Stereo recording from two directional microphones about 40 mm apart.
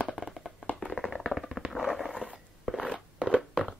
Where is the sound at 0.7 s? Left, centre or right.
Centre.